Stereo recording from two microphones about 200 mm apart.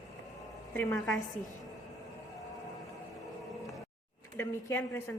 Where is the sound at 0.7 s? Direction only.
10° left (ahead or behind).